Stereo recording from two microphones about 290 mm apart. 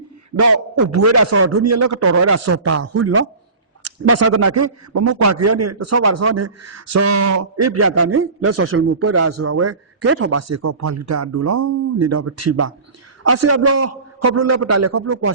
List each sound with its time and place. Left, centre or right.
0.3 s speech: right
2.8 s speech: right
7.0 s speech: right